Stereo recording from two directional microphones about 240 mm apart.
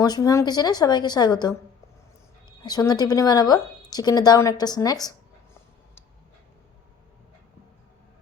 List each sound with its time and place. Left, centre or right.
0.0 s a woman's voice: centre
2.6 s a woman's voice: centre